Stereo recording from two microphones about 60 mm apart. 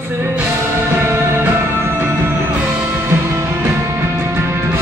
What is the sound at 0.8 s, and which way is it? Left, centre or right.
Music, right.